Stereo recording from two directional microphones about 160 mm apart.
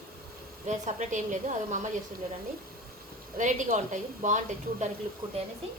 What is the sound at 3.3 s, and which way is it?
A woman's voice, 50° right (ahead or behind).